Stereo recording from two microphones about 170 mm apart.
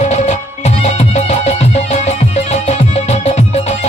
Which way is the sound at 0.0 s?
45° left (ahead or behind).